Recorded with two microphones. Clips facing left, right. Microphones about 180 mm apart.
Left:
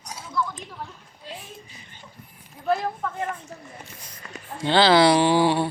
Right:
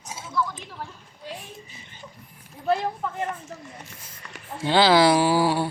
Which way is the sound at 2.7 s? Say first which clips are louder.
Even; 15° right (ahead or behind).